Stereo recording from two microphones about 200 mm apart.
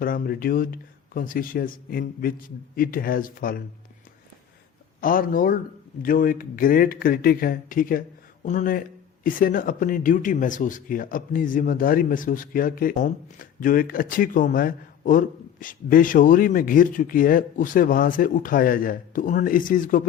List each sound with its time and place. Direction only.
0.0 s speech: 45° left (ahead or behind)
4.9 s speech: 45° left (ahead or behind)